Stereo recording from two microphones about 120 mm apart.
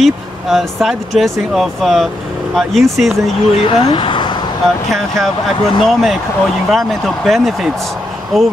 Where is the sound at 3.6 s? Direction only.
45° left (ahead or behind).